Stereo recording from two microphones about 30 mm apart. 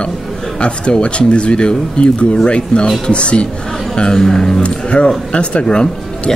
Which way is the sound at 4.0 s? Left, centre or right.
Left.